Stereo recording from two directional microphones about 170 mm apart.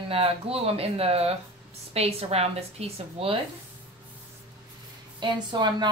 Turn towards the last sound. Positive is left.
turn(degrees=-25)  # may be behind; listen again after turning